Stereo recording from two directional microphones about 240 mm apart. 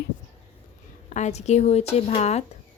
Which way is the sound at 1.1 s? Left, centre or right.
Left.